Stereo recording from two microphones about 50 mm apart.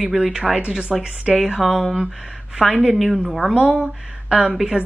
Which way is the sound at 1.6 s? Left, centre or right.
Centre.